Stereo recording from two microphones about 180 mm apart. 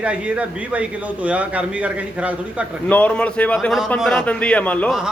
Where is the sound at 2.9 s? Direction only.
10° left (ahead or behind).